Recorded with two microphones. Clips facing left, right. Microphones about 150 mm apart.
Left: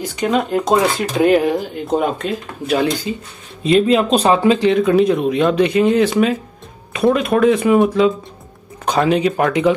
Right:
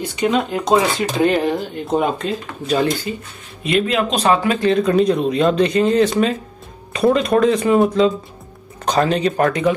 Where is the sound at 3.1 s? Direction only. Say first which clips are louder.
Left 2 dB; 20° left (ahead or behind).